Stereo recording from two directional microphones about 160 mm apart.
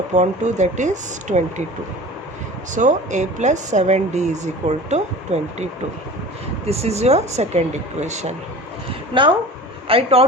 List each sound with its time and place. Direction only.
0.1 s speech: 45° right (ahead or behind)
2.7 s speech: 50° right (ahead or behind)
6.7 s speech: 40° right (ahead or behind)
9.1 s a woman's voice: 30° right (ahead or behind)